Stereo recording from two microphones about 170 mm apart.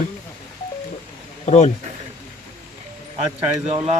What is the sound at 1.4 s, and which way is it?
Speech, 40° left (ahead or behind).